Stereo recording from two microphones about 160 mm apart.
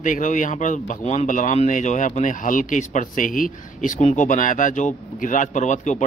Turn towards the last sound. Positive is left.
turn(degrees=50)  # may be behind; listen again after turning